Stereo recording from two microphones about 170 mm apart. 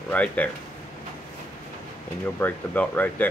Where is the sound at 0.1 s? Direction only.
10° left (ahead or behind).